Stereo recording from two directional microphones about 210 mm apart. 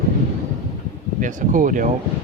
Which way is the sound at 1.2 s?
40° right (ahead or behind).